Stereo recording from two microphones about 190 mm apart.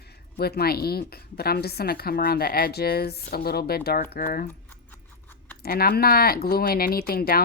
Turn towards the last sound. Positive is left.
turn(degrees=50)  # may be behind; listen again after turning